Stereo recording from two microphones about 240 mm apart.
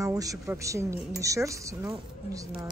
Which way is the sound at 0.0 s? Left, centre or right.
Centre.